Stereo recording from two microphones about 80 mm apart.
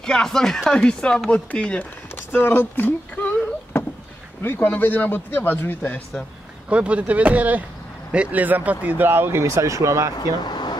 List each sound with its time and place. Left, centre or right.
0.0 s speech: centre
2.1 s a sound: left
4.4 s speech: left
6.7 s speech: centre; by 10.1 s right
10.1 s speech: left